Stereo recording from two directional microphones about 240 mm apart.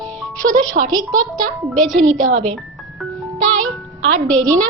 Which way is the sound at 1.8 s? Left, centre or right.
Centre.